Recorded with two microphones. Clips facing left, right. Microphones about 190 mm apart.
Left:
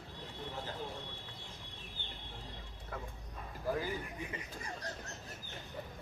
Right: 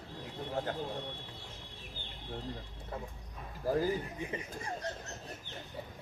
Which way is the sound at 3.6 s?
40° right (ahead or behind).